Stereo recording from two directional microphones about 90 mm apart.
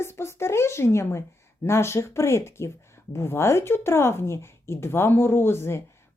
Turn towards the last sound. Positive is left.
turn(degrees=30)  # may be behind; listen again after turning